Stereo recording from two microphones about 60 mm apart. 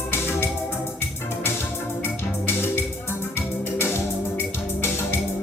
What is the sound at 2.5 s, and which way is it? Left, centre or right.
Music, left.